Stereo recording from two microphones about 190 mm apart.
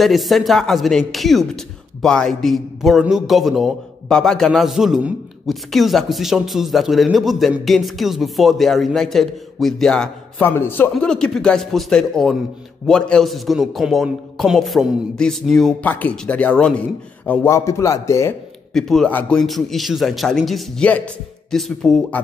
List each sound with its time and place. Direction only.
0.0 s a man's voice: centre (ahead or behind); by 18.3 s 15° left (ahead or behind)
18.7 s speech: centre (ahead or behind)